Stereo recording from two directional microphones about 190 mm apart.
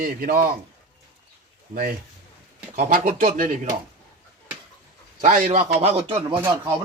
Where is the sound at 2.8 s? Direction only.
45° right (ahead or behind).